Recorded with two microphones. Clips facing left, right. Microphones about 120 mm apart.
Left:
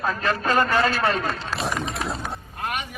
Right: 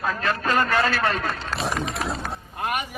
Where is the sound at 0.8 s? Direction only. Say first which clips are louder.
Left 1 dB; centre (ahead or behind).